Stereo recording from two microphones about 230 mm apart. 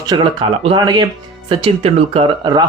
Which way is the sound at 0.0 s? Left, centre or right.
Centre.